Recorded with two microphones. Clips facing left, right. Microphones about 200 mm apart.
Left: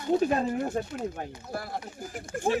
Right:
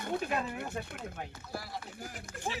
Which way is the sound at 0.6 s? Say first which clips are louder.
Left 9 dB; 50° left (ahead or behind).